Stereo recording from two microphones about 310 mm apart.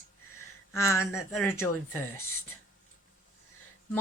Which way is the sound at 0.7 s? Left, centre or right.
Centre.